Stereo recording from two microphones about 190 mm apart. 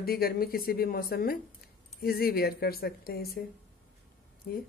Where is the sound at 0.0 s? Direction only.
55° left (ahead or behind).